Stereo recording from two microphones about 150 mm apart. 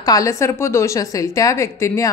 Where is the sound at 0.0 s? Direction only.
25° left (ahead or behind).